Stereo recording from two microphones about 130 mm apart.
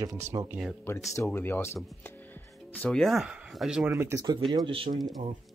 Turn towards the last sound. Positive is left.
turn(degrees=-40)  # may be behind; listen again after turning